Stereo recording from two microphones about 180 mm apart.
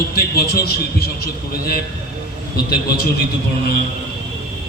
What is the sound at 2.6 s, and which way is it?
Speech, 60° left (ahead or behind).